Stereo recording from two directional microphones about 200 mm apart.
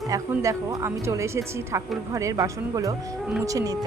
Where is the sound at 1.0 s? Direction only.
15° right (ahead or behind).